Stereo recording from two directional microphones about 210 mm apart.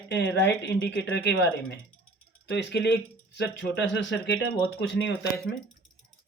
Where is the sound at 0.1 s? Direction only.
55° left (ahead or behind).